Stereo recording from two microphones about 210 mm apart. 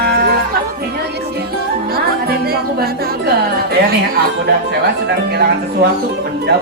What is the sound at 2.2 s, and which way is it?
Speech, 45° right (ahead or behind).